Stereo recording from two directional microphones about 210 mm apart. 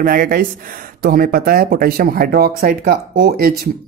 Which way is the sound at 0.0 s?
45° right (ahead or behind).